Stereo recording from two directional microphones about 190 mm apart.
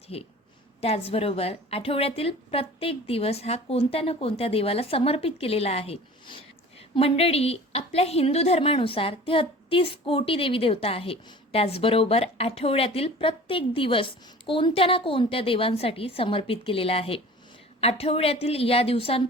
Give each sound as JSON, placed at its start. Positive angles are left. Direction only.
{"t": 0.1, "sound": "a woman's voice", "side_deg": 30}